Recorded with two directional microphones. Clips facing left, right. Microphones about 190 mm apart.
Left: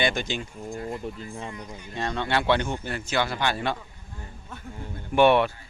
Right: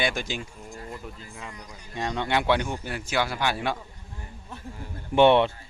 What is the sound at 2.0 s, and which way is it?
Speech, 15° right (ahead or behind).